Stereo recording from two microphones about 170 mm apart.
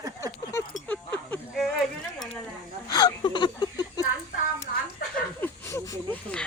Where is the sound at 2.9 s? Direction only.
25° left (ahead or behind).